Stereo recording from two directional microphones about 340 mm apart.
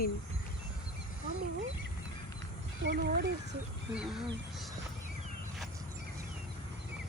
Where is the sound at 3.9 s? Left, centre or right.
Centre.